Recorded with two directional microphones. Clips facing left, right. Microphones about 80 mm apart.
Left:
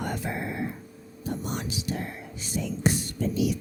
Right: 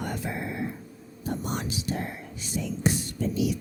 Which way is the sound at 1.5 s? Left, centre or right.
Right.